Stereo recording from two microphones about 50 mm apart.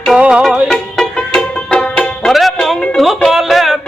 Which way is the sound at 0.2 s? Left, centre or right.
Right.